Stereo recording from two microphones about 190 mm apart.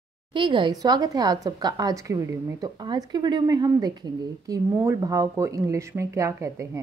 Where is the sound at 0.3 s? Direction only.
25° right (ahead or behind).